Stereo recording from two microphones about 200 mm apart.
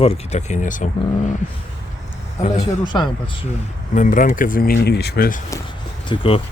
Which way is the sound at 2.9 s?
20° left (ahead or behind).